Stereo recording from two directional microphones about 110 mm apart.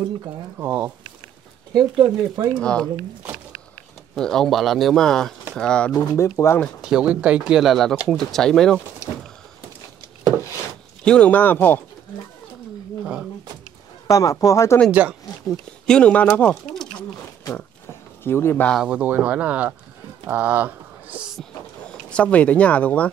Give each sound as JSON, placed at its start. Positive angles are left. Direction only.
{"t": 0.6, "sound": "speech", "side_deg": -15}
{"t": 1.8, "sound": "speech", "side_deg": -45}
{"t": 2.6, "sound": "speech", "side_deg": 10}
{"t": 4.1, "sound": "speech", "side_deg": 5}
{"t": 5.9, "sound": "speech", "side_deg": 25}
{"t": 6.8, "sound": "speech", "side_deg": -5}
{"t": 11.1, "sound": "speech", "side_deg": 10}
{"t": 13.0, "sound": "speech", "side_deg": -10}
{"t": 14.0, "sound": "a man's voice", "side_deg": 30}
{"t": 14.9, "sound": "speech", "side_deg": -15}
{"t": 15.4, "sound": "speech", "side_deg": 10}
{"t": 18.2, "sound": "speech", "side_deg": 20}
{"t": 18.9, "sound": "speech", "side_deg": -15}
{"t": 22.1, "sound": "speech", "side_deg": 15}